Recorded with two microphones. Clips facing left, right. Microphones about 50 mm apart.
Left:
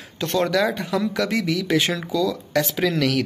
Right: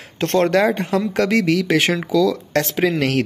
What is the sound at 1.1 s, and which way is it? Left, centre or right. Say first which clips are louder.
Speech: right 6 dB; right.